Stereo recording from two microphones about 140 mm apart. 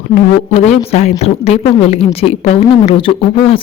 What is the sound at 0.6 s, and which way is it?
A woman's voice, 50° left (ahead or behind).